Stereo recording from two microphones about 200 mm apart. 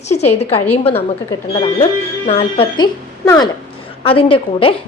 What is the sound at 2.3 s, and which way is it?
A woman's voice, 30° left (ahead or behind).